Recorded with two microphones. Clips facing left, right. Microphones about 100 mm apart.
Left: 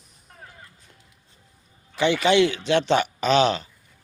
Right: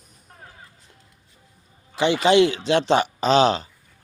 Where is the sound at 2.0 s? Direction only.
30° right (ahead or behind).